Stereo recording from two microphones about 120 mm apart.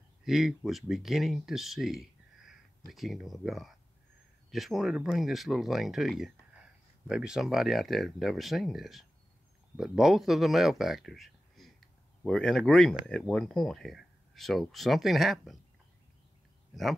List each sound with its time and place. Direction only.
0.2 s speech: centre (ahead or behind)